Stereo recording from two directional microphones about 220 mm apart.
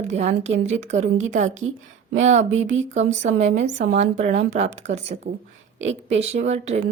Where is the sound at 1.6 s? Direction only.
70° right (ahead or behind).